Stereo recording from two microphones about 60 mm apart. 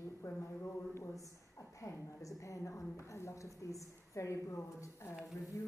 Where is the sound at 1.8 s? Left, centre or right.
Left.